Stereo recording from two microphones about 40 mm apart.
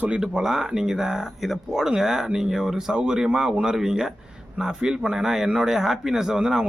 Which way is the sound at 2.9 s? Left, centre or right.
Centre.